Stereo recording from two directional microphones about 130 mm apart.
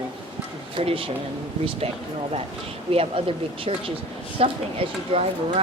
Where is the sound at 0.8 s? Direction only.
45° right (ahead or behind).